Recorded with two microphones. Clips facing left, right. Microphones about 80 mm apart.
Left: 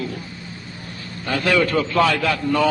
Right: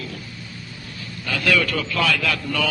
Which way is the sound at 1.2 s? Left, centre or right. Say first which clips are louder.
Left 2 dB; left.